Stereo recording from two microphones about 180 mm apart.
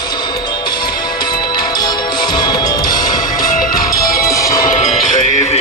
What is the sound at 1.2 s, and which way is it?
Music, 25° left (ahead or behind).